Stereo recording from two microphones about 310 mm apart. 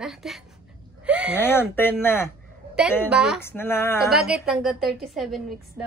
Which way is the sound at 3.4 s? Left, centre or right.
Centre.